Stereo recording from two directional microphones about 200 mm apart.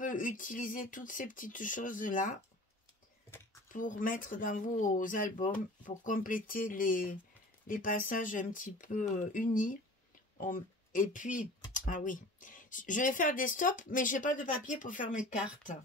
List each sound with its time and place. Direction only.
0.0 s speech: 40° left (ahead or behind)
3.7 s speech: 40° left (ahead or behind)